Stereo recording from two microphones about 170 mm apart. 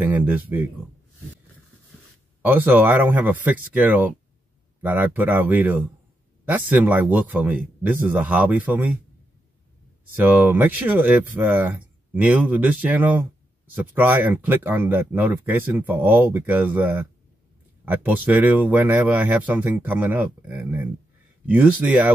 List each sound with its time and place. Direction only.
0.0 s speech: 10° right (ahead or behind)
2.4 s speech: 10° right (ahead or behind)
10.1 s speech: 10° right (ahead or behind)